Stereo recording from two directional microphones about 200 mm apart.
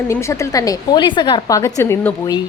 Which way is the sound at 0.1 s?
15° left (ahead or behind).